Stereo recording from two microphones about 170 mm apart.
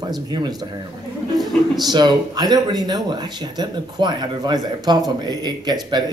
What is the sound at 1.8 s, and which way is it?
Speech, 25° right (ahead or behind).